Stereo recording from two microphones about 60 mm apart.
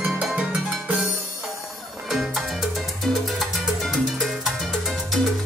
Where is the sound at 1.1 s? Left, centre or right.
Left.